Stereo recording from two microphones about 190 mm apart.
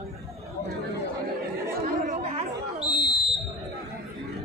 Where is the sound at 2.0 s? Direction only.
35° right (ahead or behind).